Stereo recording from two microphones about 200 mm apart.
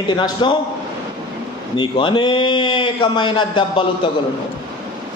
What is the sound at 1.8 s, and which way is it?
A man's voice, 25° left (ahead or behind).